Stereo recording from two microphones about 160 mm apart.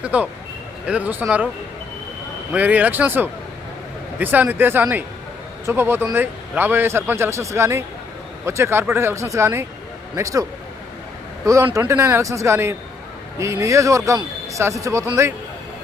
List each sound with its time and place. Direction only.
0.0 s a man's voice: 10° right (ahead or behind)
2.5 s a man's voice: 10° right (ahead or behind)
11.4 s a man's voice: 20° right (ahead or behind)